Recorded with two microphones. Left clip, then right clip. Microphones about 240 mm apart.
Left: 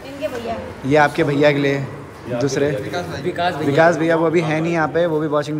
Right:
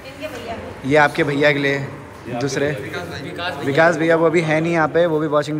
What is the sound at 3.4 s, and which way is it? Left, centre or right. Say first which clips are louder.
Speech: left 5 dB; left.